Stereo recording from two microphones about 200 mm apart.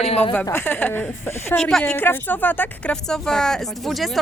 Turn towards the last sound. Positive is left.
turn(degrees=0)  # may be behind; listen again after turning